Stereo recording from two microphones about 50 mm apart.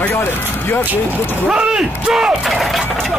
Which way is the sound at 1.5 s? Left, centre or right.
Centre.